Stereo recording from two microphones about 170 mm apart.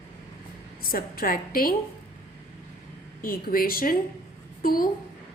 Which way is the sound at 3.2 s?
55° left (ahead or behind).